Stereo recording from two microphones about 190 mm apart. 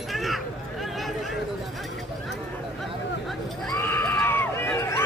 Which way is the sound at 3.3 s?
Centre (ahead or behind).